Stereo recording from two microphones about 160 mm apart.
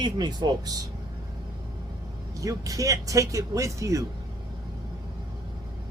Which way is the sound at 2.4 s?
20° right (ahead or behind).